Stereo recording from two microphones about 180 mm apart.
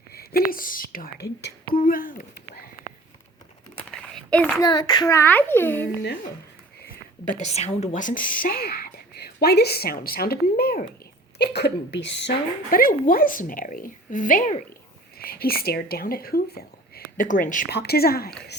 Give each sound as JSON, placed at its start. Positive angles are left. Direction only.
{"t": 0.1, "sound": "speech", "side_deg": 55}
{"t": 3.9, "sound": "a sound", "side_deg": 5}
{"t": 4.6, "sound": "a child's voice", "side_deg": 20}
{"t": 6.7, "sound": "a woman's voice", "side_deg": 50}
{"t": 11.3, "sound": "a woman's voice", "side_deg": 65}
{"t": 12.7, "sound": "a woman's voice", "side_deg": 50}
{"t": 15.2, "sound": "speech", "side_deg": 55}
{"t": 17.7, "sound": "a woman's voice", "side_deg": 65}